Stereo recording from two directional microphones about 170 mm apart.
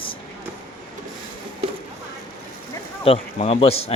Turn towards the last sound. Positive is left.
turn(degrees=35)  # may be behind; listen again after turning